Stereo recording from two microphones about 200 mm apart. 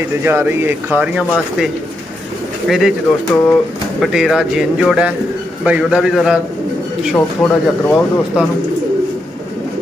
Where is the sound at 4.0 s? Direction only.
Centre (ahead or behind).